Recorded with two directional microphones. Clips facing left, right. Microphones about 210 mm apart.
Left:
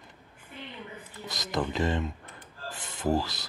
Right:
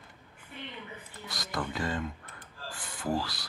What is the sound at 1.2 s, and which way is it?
Speech, 20° left (ahead or behind).